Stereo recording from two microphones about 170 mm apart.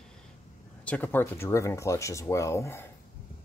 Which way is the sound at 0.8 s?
10° left (ahead or behind).